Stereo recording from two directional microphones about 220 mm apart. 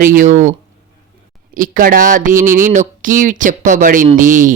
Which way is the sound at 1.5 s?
40° right (ahead or behind).